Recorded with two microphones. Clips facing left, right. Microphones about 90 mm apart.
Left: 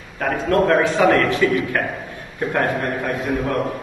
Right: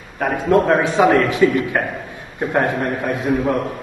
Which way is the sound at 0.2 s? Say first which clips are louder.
Right 2 dB; 15° right (ahead or behind).